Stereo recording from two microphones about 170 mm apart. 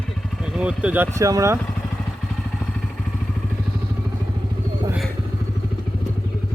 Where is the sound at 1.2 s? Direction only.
20° right (ahead or behind).